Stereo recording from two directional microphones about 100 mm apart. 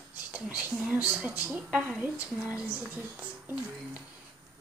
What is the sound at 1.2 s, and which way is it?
A woman's voice, 15° right (ahead or behind).